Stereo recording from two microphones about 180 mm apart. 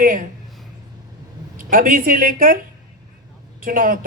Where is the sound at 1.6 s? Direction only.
50° right (ahead or behind).